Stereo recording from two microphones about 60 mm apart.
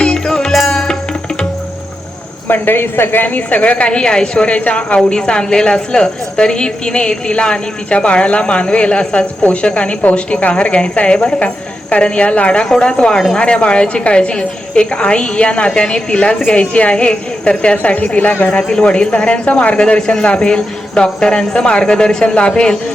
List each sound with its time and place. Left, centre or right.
0.0 s music: centre
2.5 s a woman's voice: left; by 22.8 s centre